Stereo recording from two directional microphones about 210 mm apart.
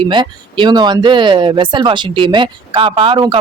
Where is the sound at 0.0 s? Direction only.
25° right (ahead or behind).